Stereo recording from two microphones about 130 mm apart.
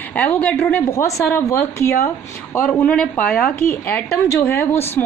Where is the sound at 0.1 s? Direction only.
10° left (ahead or behind).